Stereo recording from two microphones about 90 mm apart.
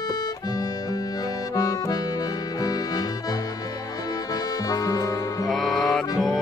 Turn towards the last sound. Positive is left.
turn(degrees=0)  # may be behind; listen again after turning